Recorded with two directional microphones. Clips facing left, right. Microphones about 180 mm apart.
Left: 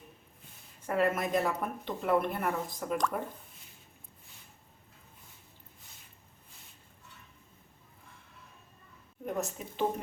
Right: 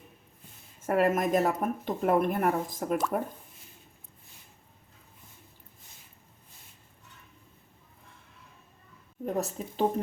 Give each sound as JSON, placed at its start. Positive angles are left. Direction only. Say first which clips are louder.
{"t": 0.8, "sound": "speech", "louder": "right 4 dB", "side_deg": -45}
{"t": 9.2, "sound": "a woman's voice", "louder": "right 4 dB", "side_deg": -35}